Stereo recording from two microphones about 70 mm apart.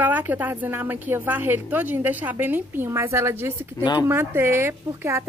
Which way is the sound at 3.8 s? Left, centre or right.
Left.